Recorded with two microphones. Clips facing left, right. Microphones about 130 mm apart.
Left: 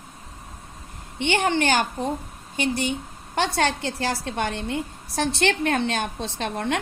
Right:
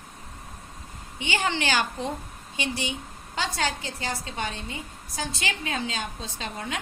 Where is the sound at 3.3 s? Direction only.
65° left (ahead or behind).